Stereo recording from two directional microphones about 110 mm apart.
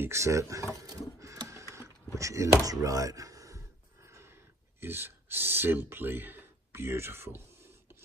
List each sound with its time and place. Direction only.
0.0 s speech: 25° right (ahead or behind)
0.7 s printer: 30° right (ahead or behind)
2.1 s speech: 30° right (ahead or behind)